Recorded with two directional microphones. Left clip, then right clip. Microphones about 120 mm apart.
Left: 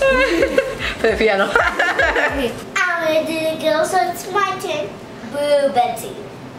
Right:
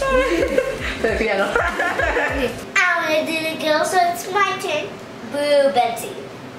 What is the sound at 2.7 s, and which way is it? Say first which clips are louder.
Child singing: even; centre (ahead or behind).